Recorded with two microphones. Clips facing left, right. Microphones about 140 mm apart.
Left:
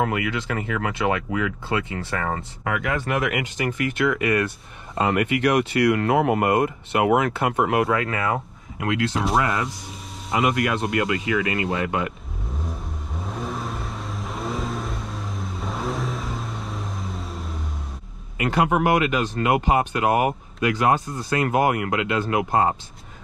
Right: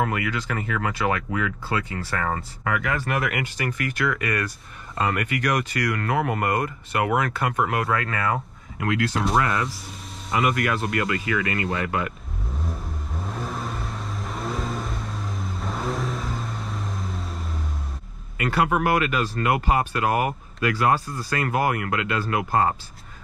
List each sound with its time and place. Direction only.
0.0 s speech: 20° left (ahead or behind)
12.6 s vehicle: centre (ahead or behind)
18.4 s speech: 20° left (ahead or behind)